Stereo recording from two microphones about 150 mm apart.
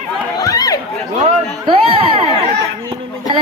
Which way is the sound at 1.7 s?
35° right (ahead or behind).